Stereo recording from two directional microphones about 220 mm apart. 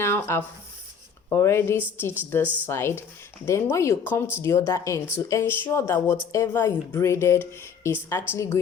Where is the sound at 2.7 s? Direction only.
10° left (ahead or behind).